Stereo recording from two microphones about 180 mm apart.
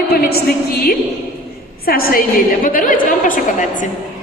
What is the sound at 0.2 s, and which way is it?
A woman's voice, 60° left (ahead or behind).